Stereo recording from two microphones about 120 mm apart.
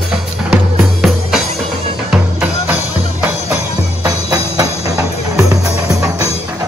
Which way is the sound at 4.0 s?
30° right (ahead or behind).